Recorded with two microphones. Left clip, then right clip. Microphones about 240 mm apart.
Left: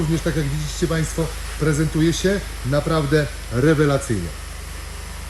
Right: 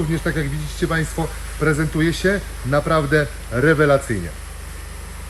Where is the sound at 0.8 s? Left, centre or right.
Centre.